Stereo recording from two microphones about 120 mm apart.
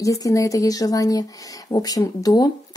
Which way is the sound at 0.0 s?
25° left (ahead or behind).